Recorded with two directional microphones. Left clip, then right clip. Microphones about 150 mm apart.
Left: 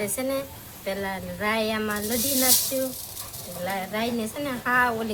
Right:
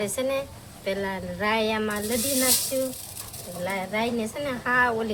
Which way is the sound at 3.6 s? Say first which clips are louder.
Right 1 dB; 30° right (ahead or behind).